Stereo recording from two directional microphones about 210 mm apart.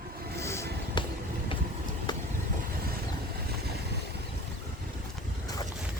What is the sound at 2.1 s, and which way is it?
Vehicle, 20° left (ahead or behind).